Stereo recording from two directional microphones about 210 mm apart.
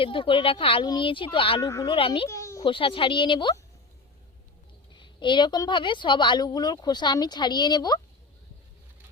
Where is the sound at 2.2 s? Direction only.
15° left (ahead or behind).